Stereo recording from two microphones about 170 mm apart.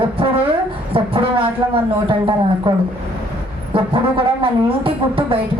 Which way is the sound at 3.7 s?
30° right (ahead or behind).